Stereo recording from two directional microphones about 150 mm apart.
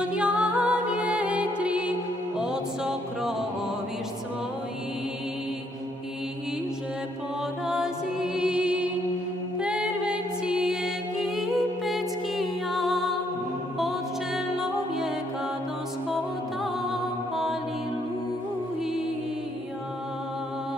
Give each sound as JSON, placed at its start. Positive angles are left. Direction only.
{"t": 0.0, "sound": "music", "side_deg": -5}
{"t": 7.6, "sound": "music", "side_deg": -5}